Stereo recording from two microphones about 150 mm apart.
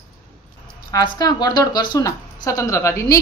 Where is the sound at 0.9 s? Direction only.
25° left (ahead or behind).